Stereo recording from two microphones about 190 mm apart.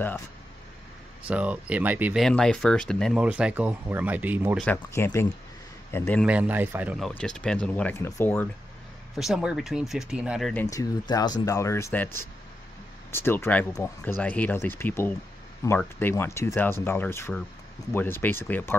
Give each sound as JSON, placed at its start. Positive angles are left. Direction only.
{"t": 1.2, "sound": "speech", "side_deg": -5}
{"t": 2.2, "sound": "speech", "side_deg": 5}
{"t": 4.6, "sound": "a man's voice", "side_deg": 10}
{"t": 6.2, "sound": "speech", "side_deg": -5}
{"t": 9.1, "sound": "speech", "side_deg": 0}
{"t": 10.5, "sound": "speech", "side_deg": 15}
{"t": 13.1, "sound": "speech", "side_deg": 10}